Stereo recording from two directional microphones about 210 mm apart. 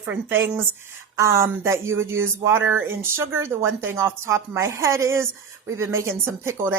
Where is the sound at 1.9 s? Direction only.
70° right (ahead or behind).